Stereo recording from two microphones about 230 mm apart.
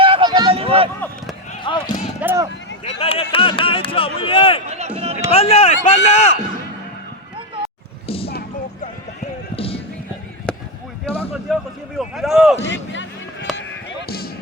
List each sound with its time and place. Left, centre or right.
0.0 s run: right
1.6 s basketball bounce: left
2.2 s speech: centre
3.0 s speech: left
4.7 s run: right
5.3 s speech: left
7.3 s a sound: right
8.0 s a sound: left
8.3 s a sound: left
9.6 s music: left
10.5 s basketball bounce: centre
11.5 s speech: centre
12.6 s a sound: left